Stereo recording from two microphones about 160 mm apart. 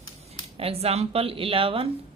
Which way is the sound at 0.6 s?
40° right (ahead or behind).